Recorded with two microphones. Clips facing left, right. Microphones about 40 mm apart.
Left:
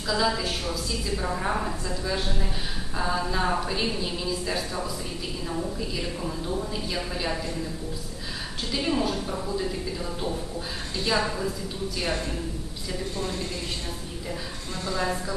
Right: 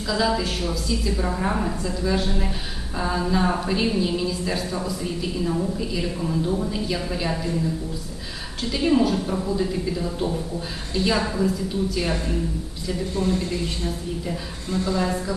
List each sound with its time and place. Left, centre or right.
0.1 s a woman's voice: centre
8.7 s a woman's voice: centre
13.2 s speech: right
14.9 s a woman's voice: centre